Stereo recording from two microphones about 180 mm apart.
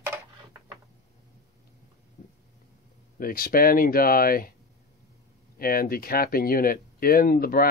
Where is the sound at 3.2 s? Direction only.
55° left (ahead or behind).